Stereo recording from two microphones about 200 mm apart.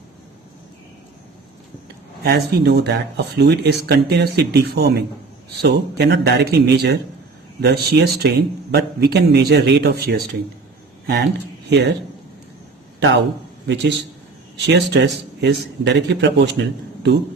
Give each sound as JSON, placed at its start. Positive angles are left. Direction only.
{"t": 2.2, "sound": "speech", "side_deg": -55}
{"t": 13.0, "sound": "speech", "side_deg": -70}
{"t": 14.7, "sound": "speech", "side_deg": -60}